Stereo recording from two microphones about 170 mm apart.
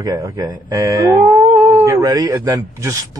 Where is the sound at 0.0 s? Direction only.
20° right (ahead or behind).